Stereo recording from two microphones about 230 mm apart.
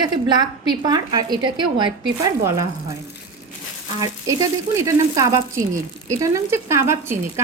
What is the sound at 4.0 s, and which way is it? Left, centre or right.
A woman's voice, centre.